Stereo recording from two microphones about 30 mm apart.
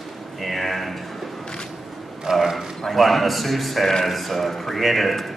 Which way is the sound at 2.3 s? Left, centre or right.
Centre.